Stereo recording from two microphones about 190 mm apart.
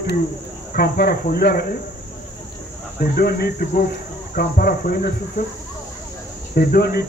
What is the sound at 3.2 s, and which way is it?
Speech, 50° left (ahead or behind).